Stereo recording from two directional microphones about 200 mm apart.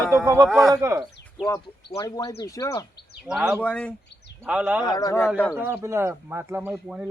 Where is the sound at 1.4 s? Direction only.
5° right (ahead or behind).